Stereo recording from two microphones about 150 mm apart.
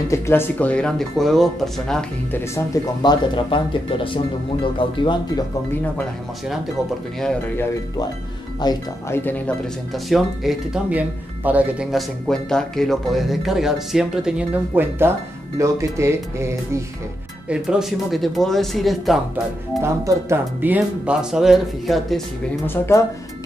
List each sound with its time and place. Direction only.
0.1 s speech: 15° left (ahead or behind)
2.5 s speech: 25° left (ahead or behind)
7.2 s speech: 5° left (ahead or behind)
8.6 s speech: 30° left (ahead or behind)
9.1 s speech: 10° left (ahead or behind)
9.9 s speech: centre (ahead or behind)
12.3 s speech: 5° left (ahead or behind)
14.8 s speech: 15° right (ahead or behind)
17.5 s speech: 5° right (ahead or behind)
19.8 s speech: 20° right (ahead or behind); by 22.2 s centre (ahead or behind)
22.7 s speech: 20° left (ahead or behind)